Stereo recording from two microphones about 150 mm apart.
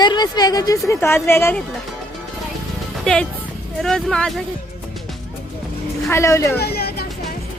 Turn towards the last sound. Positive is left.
turn(degrees=90)